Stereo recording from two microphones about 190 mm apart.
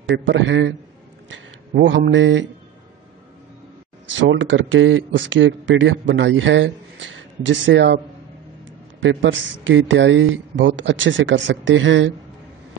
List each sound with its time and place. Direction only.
0.1 s speech: 75° right (ahead or behind)
4.2 s speech: 80° right
9.0 s speech: 80° right